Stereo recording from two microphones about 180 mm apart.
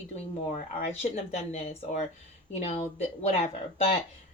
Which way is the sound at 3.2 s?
35° left (ahead or behind).